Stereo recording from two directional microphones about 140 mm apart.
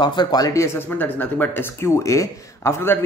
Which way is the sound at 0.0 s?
30° left (ahead or behind).